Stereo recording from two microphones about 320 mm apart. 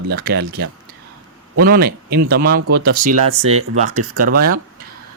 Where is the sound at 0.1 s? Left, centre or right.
Right.